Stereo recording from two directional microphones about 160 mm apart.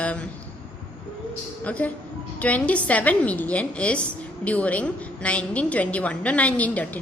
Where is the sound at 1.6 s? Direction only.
10° left (ahead or behind).